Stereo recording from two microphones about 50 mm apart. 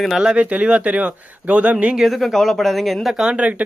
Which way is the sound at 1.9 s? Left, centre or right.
Centre.